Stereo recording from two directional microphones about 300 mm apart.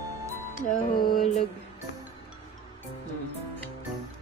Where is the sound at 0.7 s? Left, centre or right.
Left.